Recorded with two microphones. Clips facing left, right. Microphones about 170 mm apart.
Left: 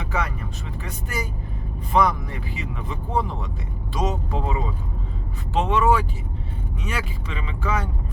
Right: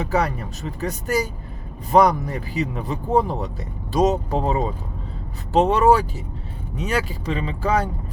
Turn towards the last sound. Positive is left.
turn(degrees=-35)  # may be behind; listen again after turning